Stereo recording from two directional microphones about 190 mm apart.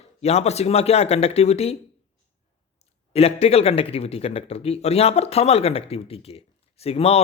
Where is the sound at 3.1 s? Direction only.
30° left (ahead or behind).